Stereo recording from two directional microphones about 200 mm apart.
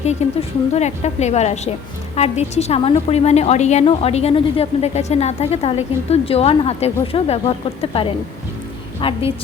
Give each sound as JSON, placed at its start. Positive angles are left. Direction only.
{"t": 0.2, "sound": "a woman's voice", "side_deg": 30}